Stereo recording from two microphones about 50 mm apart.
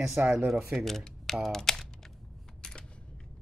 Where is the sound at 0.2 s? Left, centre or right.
Right.